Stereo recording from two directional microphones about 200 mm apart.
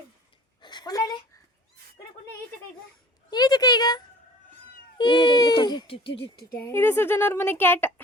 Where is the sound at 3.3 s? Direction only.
20° left (ahead or behind).